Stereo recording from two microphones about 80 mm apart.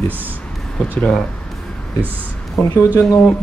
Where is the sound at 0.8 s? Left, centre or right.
Centre.